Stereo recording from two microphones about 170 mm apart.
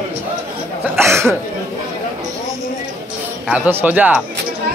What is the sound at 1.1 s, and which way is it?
Cough, 15° right (ahead or behind).